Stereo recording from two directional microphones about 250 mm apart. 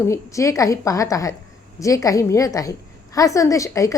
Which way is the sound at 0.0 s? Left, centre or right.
Centre.